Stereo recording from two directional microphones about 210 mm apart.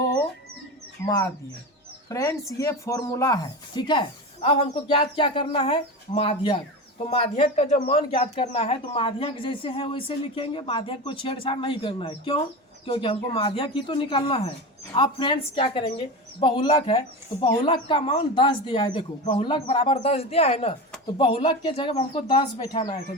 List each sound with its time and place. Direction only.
1.0 s speech: 15° left (ahead or behind)